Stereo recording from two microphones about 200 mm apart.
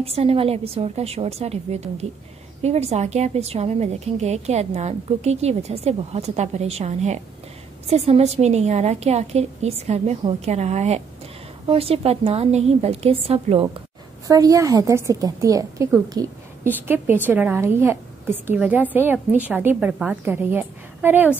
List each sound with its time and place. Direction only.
0.0 s a woman's voice: 30° right (ahead or behind)
14.2 s a woman's voice: 15° right (ahead or behind)